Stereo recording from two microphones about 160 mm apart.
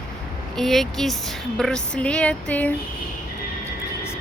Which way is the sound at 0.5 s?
Centre (ahead or behind).